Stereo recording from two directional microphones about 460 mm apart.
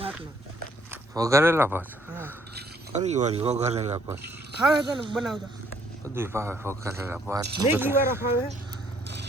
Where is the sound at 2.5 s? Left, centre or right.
Centre.